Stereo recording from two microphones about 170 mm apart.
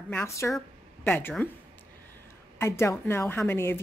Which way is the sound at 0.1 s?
15° left (ahead or behind).